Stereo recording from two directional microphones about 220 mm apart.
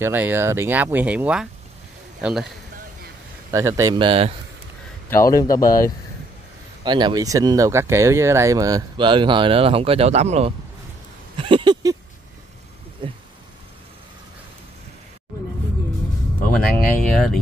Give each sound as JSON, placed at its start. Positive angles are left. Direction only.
{"t": 0.0, "sound": "speech", "side_deg": -10}
{"t": 3.5, "sound": "speech", "side_deg": -15}
{"t": 5.1, "sound": "a man's voice", "side_deg": 15}
{"t": 6.8, "sound": "speech", "side_deg": -20}
{"t": 11.3, "sound": "a sound", "side_deg": -20}
{"t": 13.0, "sound": "a sound", "side_deg": -25}
{"t": 16.6, "sound": "speech", "side_deg": 5}